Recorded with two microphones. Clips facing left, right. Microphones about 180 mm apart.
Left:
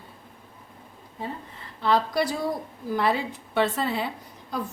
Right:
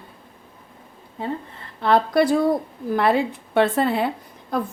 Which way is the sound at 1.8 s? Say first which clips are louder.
Right 6 dB; 55° right (ahead or behind).